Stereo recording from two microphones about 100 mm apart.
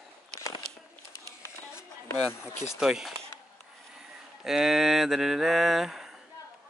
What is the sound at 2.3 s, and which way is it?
Speech, 25° left (ahead or behind).